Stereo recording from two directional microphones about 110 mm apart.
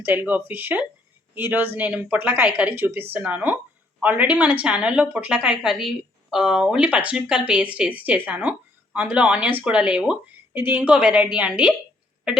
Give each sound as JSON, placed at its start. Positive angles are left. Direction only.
{"t": 0.0, "sound": "a woman's voice", "side_deg": -15}